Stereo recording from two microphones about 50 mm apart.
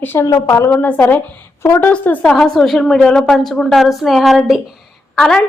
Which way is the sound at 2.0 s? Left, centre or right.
Left.